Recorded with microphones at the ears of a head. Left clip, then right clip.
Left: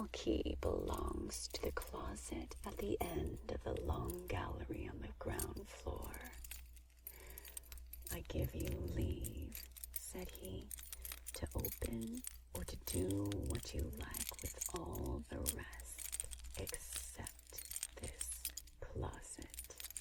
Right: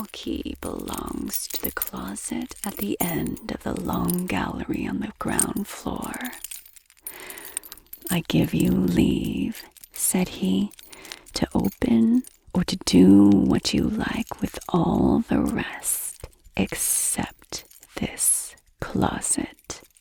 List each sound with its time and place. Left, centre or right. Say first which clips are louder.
0.0 s speech: right 9 dB; right